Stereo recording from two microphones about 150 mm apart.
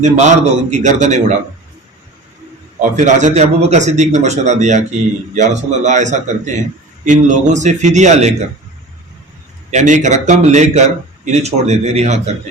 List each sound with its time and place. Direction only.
0.0 s speech: 50° right (ahead or behind)
2.9 s speech: 55° right (ahead or behind)
9.7 s speech: 55° right (ahead or behind)